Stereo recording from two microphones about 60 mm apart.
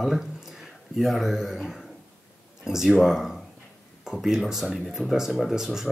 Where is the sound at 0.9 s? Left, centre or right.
Centre.